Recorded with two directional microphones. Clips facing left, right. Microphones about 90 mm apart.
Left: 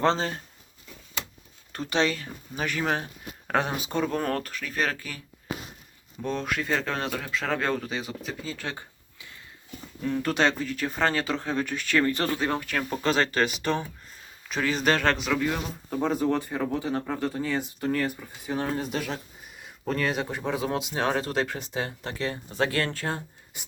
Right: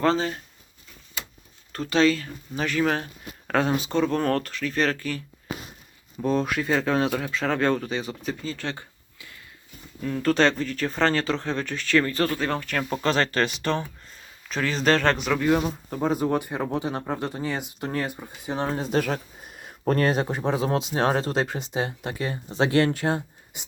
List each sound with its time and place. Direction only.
0.0 s speech: 30° left (ahead or behind)
1.7 s speech: 20° left (ahead or behind)
6.2 s speech: 5° right (ahead or behind); by 12.0 s 15° left (ahead or behind)
12.0 s speech: 25° left (ahead or behind)
12.6 s speech: centre (ahead or behind)
15.4 s speech: 25° right (ahead or behind)
15.9 s speech: 10° right (ahead or behind); by 18.9 s 25° right (ahead or behind)
18.9 s speech: 50° right (ahead or behind); by 23.6 s 20° right (ahead or behind)